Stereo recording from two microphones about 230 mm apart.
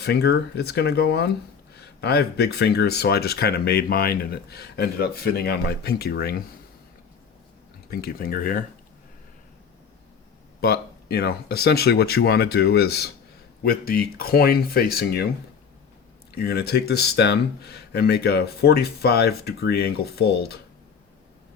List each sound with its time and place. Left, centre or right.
0.0 s speech: left
7.9 s speech: left
10.6 s speech: left
16.3 s speech: left